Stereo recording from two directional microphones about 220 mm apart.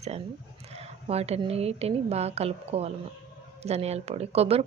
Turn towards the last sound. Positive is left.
turn(degrees=-25)  # may be behind; listen again after turning